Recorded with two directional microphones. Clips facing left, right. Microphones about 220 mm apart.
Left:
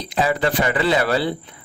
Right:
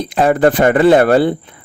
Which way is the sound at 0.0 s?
55° right (ahead or behind).